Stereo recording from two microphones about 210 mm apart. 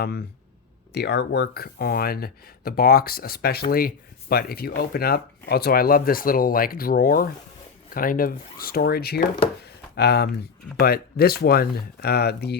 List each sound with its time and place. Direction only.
0.0 s speech: 50° left (ahead or behind)